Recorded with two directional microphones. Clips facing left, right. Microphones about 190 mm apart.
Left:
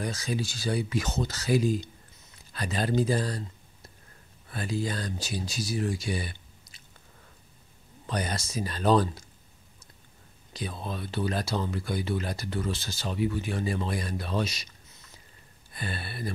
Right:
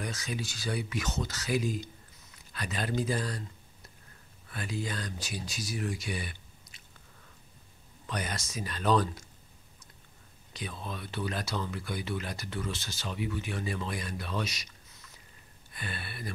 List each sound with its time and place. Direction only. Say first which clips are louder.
0.0 s speech: left 5 dB; 30° left (ahead or behind)
4.5 s speech: left 5 dB; 35° left (ahead or behind)
8.1 s speech: left 5 dB; 35° left (ahead or behind)
10.5 s speech: left 4 dB; 35° left (ahead or behind)
15.7 s speech: left 4 dB; 35° left (ahead or behind)